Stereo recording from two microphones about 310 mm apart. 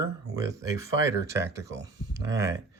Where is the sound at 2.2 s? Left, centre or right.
Centre.